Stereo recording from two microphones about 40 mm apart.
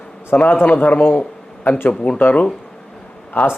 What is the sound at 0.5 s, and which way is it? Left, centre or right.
Speech, left.